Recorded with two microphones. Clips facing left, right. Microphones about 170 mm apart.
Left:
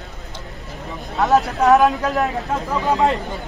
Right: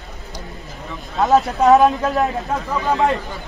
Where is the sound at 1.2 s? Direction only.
20° right (ahead or behind).